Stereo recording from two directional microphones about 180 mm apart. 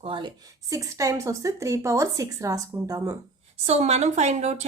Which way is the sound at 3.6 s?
35° right (ahead or behind).